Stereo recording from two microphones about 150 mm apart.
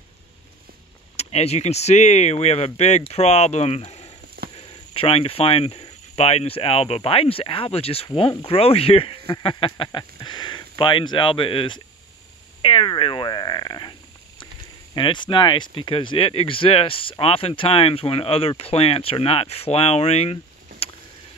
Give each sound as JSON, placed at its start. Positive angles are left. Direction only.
{"t": 1.1, "sound": "speech", "side_deg": 45}
{"t": 4.6, "sound": "speech", "side_deg": 35}
{"t": 15.0, "sound": "speech", "side_deg": 30}